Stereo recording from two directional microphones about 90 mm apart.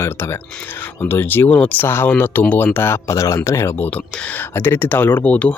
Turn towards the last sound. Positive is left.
turn(degrees=15)  # may be behind; listen again after turning